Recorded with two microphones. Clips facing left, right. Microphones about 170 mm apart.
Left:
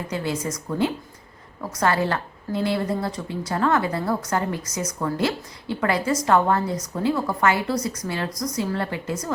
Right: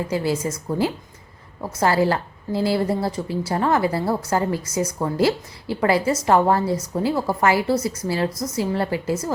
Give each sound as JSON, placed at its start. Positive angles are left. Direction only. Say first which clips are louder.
{"t": 0.1, "sound": "a woman's voice", "louder": "right 1 dB", "side_deg": -30}